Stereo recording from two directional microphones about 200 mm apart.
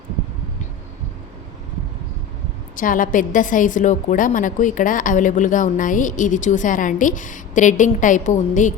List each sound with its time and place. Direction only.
2.7 s a woman's voice: 45° left (ahead or behind)